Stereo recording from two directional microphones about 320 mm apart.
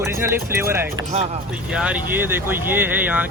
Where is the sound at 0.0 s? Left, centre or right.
Centre.